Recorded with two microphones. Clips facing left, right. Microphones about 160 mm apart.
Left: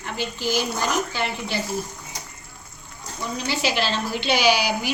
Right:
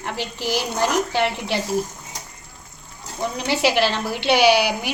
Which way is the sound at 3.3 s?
70° right (ahead or behind).